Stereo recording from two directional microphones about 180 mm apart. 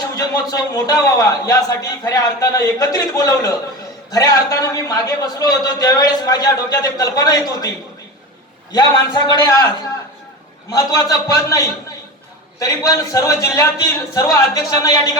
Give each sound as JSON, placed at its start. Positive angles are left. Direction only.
{"t": 0.2, "sound": "a man's voice", "side_deg": 20}
{"t": 8.7, "sound": "a man's voice", "side_deg": 25}
{"t": 10.7, "sound": "a man's voice", "side_deg": 20}